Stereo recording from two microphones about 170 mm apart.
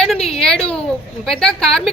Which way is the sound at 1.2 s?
5° left (ahead or behind).